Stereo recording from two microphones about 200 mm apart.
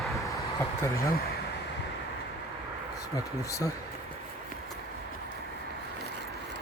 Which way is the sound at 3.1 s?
15° left (ahead or behind).